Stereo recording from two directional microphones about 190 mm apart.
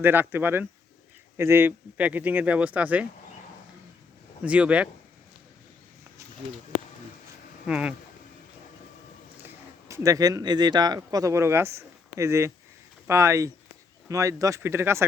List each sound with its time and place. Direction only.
0.0 s speech: 10° right (ahead or behind)
4.4 s speech: 5° right (ahead or behind)
7.7 s speech: 5° right (ahead or behind)
9.9 s speech: 15° right (ahead or behind)